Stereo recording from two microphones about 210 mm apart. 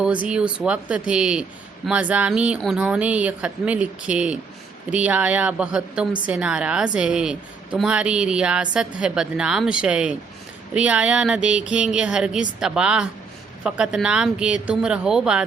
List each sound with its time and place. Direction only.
0.0 s a woman's voice: 5° right (ahead or behind)